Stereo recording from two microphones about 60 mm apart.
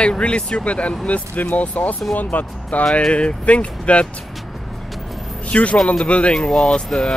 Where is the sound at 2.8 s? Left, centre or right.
Centre.